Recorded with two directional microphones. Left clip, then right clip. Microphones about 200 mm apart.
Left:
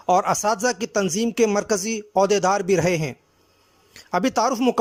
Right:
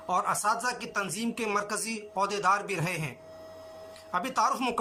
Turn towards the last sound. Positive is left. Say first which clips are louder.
# left 7 dB
turn(degrees=35)  # may be behind; listen again after turning